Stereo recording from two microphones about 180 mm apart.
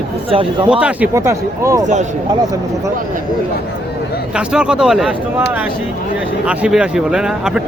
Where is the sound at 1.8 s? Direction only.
40° right (ahead or behind).